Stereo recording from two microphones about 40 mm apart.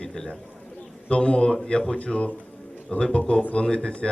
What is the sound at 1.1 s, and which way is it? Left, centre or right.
Speech, left.